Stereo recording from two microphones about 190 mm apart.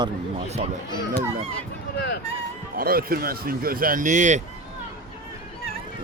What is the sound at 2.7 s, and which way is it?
Speech, 50° right (ahead or behind).